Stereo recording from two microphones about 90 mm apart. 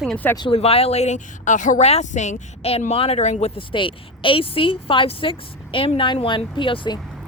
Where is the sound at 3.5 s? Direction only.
75° left (ahead or behind).